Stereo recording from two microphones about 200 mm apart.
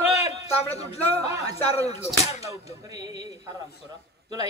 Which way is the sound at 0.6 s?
30° left (ahead or behind).